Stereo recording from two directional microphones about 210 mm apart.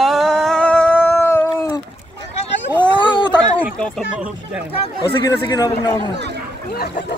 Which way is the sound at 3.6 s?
5° left (ahead or behind).